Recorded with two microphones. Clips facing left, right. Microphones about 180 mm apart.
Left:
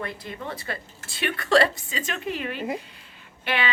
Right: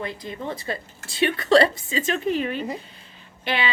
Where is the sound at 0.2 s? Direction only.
20° right (ahead or behind).